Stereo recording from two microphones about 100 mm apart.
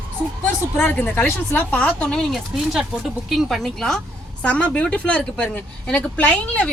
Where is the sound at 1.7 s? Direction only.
10° left (ahead or behind).